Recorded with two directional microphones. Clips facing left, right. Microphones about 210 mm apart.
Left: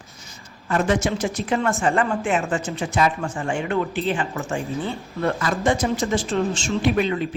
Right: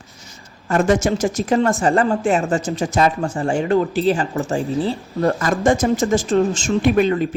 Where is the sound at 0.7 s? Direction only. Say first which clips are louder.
Right 4 dB; 45° right (ahead or behind).